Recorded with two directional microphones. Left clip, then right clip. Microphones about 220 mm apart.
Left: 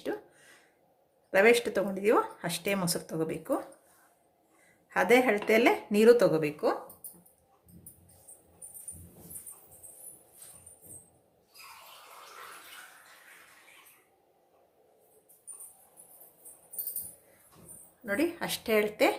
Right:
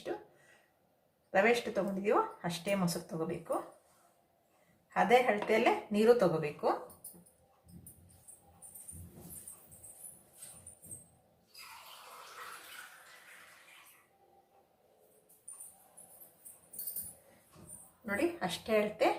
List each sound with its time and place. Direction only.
1.3 s speech: 50° left (ahead or behind)
4.9 s speech: 50° left (ahead or behind)
18.0 s speech: 50° left (ahead or behind)